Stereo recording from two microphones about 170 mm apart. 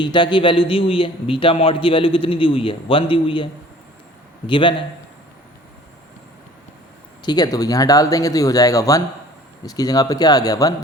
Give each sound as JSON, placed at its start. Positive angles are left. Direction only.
{"t": 0.0, "sound": "a man's voice", "side_deg": 30}
{"t": 7.2, "sound": "speech", "side_deg": 25}